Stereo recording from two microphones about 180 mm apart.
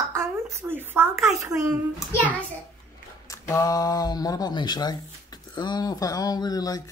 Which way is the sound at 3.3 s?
15° left (ahead or behind).